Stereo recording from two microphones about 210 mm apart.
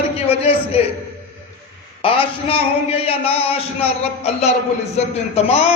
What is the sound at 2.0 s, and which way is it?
A man's voice, 25° left (ahead or behind).